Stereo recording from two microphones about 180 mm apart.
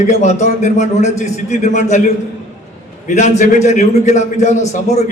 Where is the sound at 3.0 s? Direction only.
45° left (ahead or behind).